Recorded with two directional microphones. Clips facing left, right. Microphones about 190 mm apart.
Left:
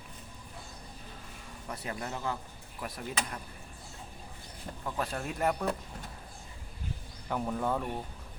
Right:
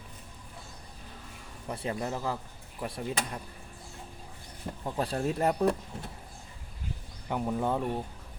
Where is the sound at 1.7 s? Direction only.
30° right (ahead or behind).